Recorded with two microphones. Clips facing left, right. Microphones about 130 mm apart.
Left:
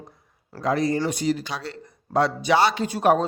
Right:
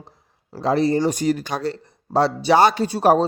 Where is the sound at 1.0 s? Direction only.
50° right (ahead or behind).